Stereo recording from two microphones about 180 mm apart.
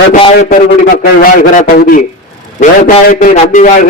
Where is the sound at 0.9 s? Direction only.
55° left (ahead or behind).